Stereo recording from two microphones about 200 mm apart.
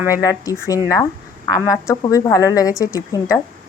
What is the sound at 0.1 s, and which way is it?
A woman's voice, 15° left (ahead or behind).